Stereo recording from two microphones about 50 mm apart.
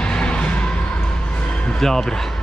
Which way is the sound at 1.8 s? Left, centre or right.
Centre.